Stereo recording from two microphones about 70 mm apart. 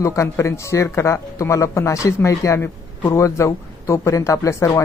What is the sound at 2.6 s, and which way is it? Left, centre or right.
Speech, left.